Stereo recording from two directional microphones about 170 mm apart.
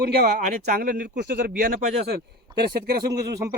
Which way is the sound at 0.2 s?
60° right (ahead or behind).